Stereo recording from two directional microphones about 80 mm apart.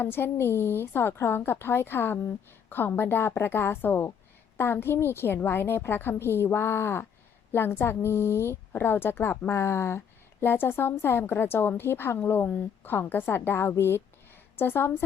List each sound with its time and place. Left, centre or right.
0.0 s a woman's voice: left